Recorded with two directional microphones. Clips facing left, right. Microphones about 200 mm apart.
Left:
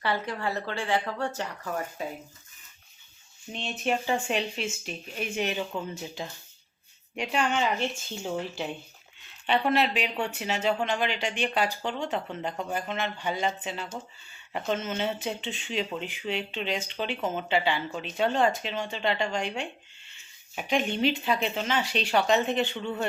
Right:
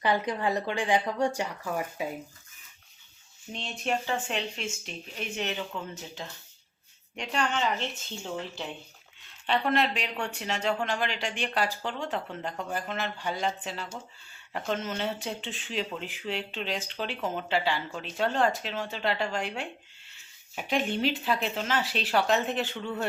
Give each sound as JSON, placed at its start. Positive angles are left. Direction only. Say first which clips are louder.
{"t": 0.0, "sound": "speech", "louder": "right 3 dB", "side_deg": -15}
{"t": 3.5, "sound": "a woman's voice", "louder": "left 2 dB", "side_deg": 5}